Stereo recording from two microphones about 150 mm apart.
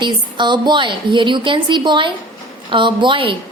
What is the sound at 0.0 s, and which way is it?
A woman's voice, 30° right (ahead or behind).